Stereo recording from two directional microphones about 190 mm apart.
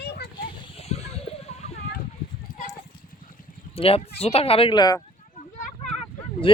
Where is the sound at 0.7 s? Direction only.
30° left (ahead or behind).